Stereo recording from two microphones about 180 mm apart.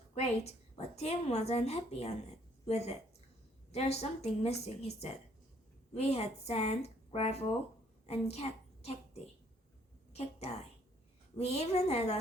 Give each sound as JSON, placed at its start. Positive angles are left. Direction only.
{"t": 0.1, "sound": "a woman's voice", "side_deg": 35}
{"t": 10.1, "sound": "a woman's voice", "side_deg": 35}